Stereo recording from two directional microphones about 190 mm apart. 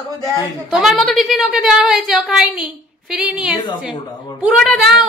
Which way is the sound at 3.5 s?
25° left (ahead or behind).